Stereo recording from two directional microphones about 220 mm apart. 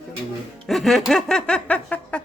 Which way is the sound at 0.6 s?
Centre (ahead or behind).